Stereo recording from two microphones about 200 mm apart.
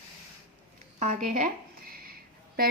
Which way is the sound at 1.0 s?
35° right (ahead or behind).